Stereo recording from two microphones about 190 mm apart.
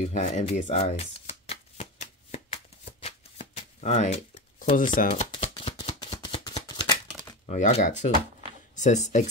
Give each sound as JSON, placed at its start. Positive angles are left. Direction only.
{"t": 0.1, "sound": "shuffling cards", "side_deg": 40}
{"t": 5.3, "sound": "shuffling cards", "side_deg": 25}
{"t": 7.4, "sound": "speech", "side_deg": 40}